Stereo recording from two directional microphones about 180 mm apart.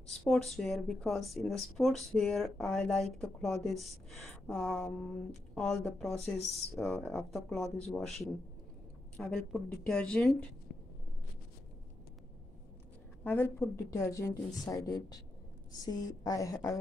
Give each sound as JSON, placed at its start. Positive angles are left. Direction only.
{"t": 0.2, "sound": "speech", "side_deg": 0}
{"t": 6.3, "sound": "speech", "side_deg": 35}
{"t": 6.7, "sound": "speech", "side_deg": 0}
{"t": 9.1, "sound": "speech", "side_deg": 5}
{"t": 13.2, "sound": "a woman's voice", "side_deg": 10}